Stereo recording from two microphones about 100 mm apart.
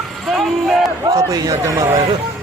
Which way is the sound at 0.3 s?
Centre (ahead or behind).